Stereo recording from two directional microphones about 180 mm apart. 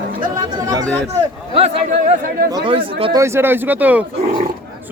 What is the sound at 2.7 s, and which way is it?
Speech, 30° right (ahead or behind).